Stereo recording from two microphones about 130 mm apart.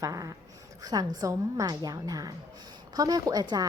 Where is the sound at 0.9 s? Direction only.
30° right (ahead or behind).